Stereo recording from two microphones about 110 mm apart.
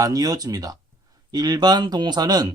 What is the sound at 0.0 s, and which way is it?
Speech, 35° right (ahead or behind).